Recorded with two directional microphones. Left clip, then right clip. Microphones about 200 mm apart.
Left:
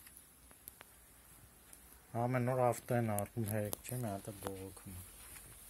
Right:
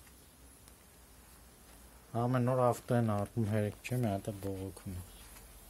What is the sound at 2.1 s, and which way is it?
Speech, 15° left (ahead or behind).